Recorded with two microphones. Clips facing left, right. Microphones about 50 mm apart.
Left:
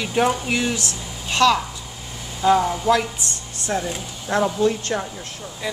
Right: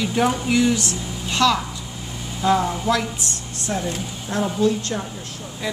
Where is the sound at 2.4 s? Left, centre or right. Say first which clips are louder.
Left 2 dB; centre.